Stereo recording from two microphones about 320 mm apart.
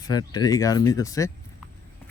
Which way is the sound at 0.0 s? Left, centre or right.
Centre.